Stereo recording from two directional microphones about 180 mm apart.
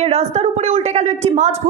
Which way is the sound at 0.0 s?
35° right (ahead or behind).